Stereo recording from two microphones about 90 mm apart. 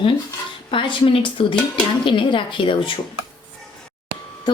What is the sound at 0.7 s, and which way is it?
Speech, 70° left (ahead or behind).